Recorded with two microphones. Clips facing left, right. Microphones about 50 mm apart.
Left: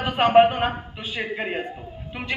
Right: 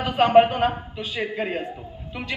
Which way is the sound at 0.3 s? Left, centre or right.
Centre.